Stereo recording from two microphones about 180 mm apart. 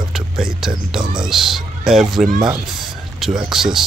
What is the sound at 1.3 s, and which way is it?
Speech, centre (ahead or behind).